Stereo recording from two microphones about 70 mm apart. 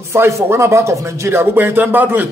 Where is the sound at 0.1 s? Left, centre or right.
Right.